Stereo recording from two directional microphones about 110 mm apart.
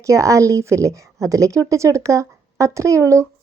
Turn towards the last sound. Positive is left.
turn(degrees=-30)  # may be behind; listen again after turning